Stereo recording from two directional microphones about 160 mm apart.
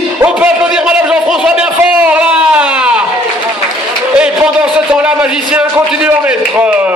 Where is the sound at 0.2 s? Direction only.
5° right (ahead or behind).